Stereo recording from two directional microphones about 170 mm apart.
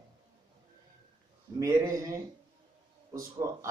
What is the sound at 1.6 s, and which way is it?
Speech, 20° right (ahead or behind).